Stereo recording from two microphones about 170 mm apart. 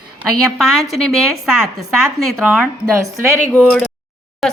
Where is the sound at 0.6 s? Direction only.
Centre (ahead or behind).